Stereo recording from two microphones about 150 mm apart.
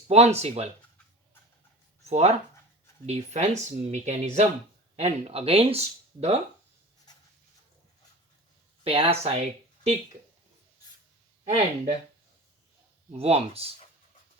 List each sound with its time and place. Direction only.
0.1 s speech: 45° right (ahead or behind)
2.0 s speech: 45° right (ahead or behind)
8.8 s speech: 40° right (ahead or behind)
11.4 s speech: 45° right (ahead or behind)
13.1 s speech: 45° right (ahead or behind)